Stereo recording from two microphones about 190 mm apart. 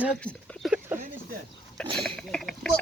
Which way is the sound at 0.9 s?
10° right (ahead or behind).